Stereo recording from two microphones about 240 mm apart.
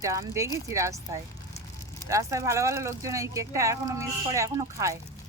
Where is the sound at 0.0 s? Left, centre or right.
Centre.